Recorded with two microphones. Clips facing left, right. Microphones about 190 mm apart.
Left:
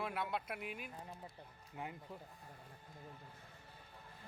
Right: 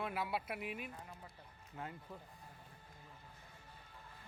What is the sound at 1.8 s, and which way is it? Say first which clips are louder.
Speech: left 1 dB; 15° left (ahead or behind).